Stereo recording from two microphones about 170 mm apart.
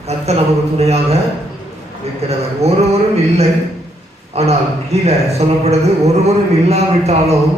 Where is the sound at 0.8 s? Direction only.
40° right (ahead or behind).